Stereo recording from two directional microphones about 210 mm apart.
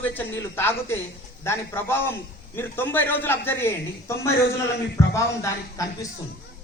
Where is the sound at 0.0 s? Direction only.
10° left (ahead or behind).